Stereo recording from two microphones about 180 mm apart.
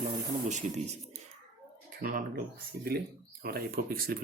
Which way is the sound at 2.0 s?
50° right (ahead or behind).